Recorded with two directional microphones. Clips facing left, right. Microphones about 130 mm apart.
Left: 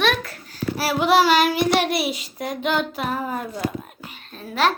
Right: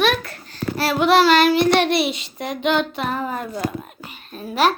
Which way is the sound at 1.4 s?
65° right (ahead or behind).